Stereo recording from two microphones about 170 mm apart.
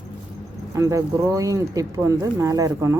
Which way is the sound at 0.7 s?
20° right (ahead or behind).